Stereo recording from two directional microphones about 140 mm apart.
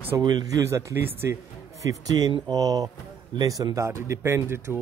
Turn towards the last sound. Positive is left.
turn(degrees=-20)  # may be behind; listen again after turning